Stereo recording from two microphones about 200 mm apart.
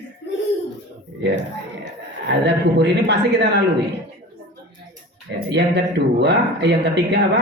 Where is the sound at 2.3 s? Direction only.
60° right (ahead or behind).